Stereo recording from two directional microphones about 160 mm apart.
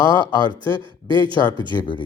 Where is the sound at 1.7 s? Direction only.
30° left (ahead or behind).